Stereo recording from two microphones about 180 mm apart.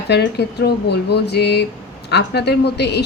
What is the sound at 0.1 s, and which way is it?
A woman's voice, 70° left (ahead or behind).